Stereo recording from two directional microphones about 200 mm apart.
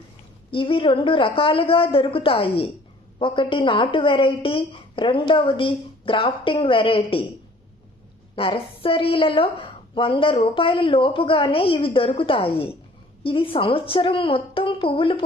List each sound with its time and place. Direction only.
0.5 s a woman's voice: 25° left (ahead or behind)
8.4 s a woman's voice: 25° left (ahead or behind)